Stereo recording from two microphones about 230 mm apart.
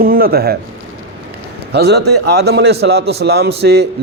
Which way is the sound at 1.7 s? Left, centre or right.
Right.